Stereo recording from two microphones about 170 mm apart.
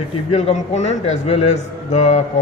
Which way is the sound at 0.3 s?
40° left (ahead or behind).